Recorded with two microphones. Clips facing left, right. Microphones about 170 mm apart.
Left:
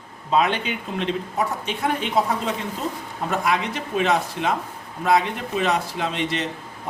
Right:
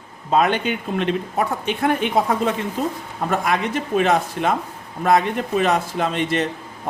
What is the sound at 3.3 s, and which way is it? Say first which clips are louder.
Speech: right 2 dB; 50° right (ahead or behind).